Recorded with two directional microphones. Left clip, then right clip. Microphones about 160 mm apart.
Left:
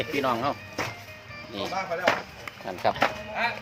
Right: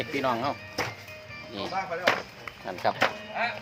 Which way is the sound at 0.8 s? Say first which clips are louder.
Right 1 dB; 75° right (ahead or behind).